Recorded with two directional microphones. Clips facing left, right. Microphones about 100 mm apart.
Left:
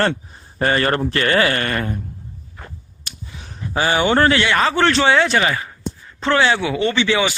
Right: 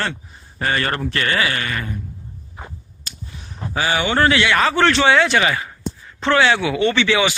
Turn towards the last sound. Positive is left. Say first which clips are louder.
# right 1 dB
turn(degrees=30)  # may be behind; listen again after turning